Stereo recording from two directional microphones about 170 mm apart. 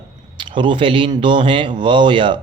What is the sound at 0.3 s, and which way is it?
Speech, 30° right (ahead or behind).